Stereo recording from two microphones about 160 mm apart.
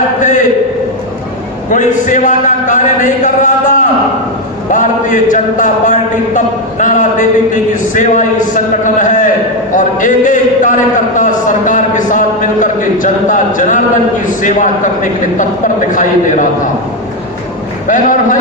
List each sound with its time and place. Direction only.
1.7 s a man's voice: 50° left (ahead or behind)
17.8 s a man's voice: 55° left (ahead or behind)